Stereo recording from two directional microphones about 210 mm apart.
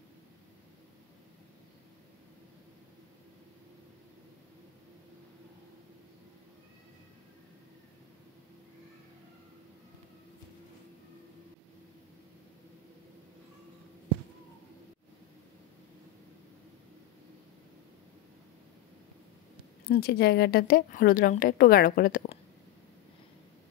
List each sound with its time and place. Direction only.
19.9 s a woman's voice: 50° left (ahead or behind)